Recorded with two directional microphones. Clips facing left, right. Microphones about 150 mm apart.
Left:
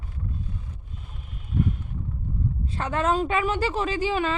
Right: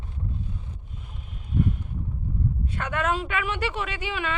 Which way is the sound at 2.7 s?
30° left (ahead or behind).